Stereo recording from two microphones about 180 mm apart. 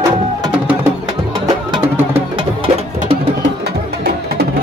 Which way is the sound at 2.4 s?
30° right (ahead or behind).